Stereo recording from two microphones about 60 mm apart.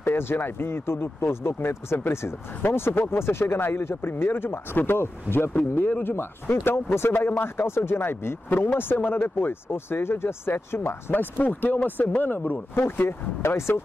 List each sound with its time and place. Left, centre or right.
0.0 s speech: left